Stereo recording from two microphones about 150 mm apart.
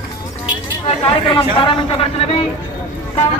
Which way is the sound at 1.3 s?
35° left (ahead or behind).